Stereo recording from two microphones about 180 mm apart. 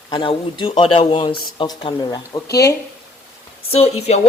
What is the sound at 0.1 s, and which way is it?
Speech, 25° left (ahead or behind).